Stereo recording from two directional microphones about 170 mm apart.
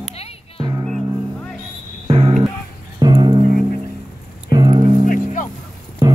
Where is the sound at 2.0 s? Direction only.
35° right (ahead or behind).